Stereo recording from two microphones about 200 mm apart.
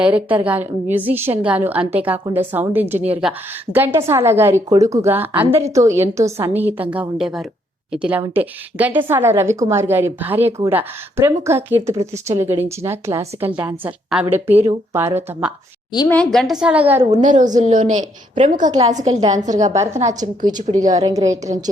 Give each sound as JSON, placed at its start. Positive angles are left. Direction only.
{"t": 0.0, "sound": "a woman's voice", "side_deg": -10}
{"t": 16.0, "sound": "a woman's voice", "side_deg": 5}
{"t": 17.0, "sound": "a woman's voice", "side_deg": -35}
{"t": 19.7, "sound": "a woman's voice", "side_deg": -15}
{"t": 20.6, "sound": "a woman's voice", "side_deg": -40}
{"t": 21.0, "sound": "a woman's voice", "side_deg": -15}